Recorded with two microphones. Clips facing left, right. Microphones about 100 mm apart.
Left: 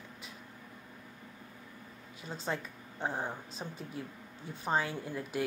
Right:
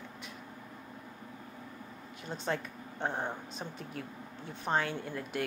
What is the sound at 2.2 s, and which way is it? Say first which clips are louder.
Speech: right 2 dB; 5° left (ahead or behind).